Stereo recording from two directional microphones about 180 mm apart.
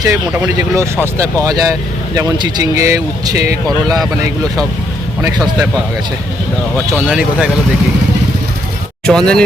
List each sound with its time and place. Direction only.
0.0 s speech: 20° right (ahead or behind)
5.4 s speech: 5° right (ahead or behind)
6.9 s speech: 5° right (ahead or behind)
9.0 s speech: 5° left (ahead or behind)